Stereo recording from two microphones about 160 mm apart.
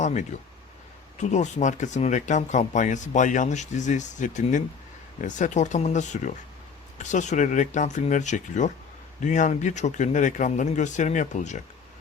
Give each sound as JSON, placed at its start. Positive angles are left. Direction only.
{"t": 0.0, "sound": "speech", "side_deg": 50}